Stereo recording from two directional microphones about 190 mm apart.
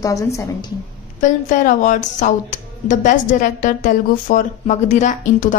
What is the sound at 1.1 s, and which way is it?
A woman's voice, 40° left (ahead or behind).